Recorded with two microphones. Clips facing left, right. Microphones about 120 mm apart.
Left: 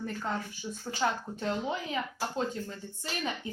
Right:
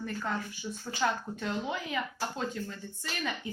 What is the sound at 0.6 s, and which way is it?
Speech, 20° left (ahead or behind).